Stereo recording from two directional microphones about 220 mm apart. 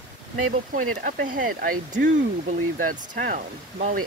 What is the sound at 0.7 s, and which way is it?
Speech, 40° right (ahead or behind).